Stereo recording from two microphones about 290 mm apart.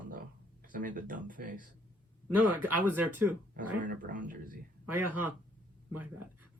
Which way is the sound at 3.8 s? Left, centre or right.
Right.